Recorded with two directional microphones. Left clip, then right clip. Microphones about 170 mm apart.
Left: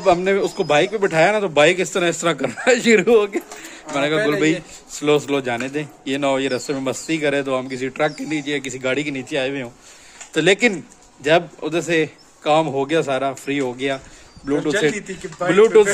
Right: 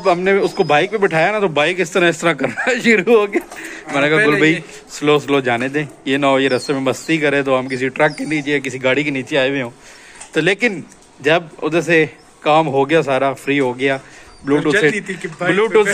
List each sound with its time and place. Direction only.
0.0 s speech: centre (ahead or behind)
15.0 s speech: 25° left (ahead or behind)
15.4 s speech: centre (ahead or behind)